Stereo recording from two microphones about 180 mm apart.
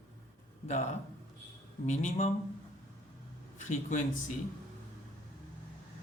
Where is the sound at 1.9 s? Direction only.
40° left (ahead or behind).